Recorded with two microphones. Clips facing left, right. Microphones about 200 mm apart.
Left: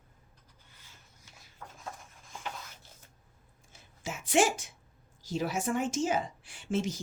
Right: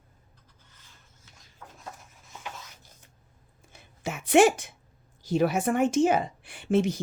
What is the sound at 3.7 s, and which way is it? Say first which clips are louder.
A woman's voice: right 5 dB; 60° right (ahead or behind).